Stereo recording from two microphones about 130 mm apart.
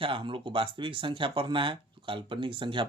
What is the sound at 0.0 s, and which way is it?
Speech, 40° right (ahead or behind).